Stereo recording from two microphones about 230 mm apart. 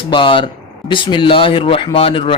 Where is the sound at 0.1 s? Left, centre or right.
Left.